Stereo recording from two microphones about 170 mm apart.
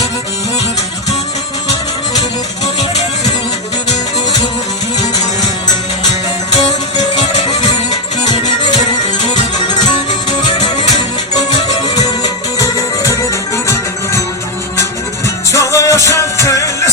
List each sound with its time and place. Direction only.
7.2 s music: 25° left (ahead or behind)
11.9 s music: 20° left (ahead or behind)
15.5 s music: 20° left (ahead or behind)